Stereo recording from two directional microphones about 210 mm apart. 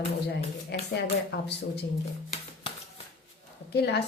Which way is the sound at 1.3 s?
55° left (ahead or behind).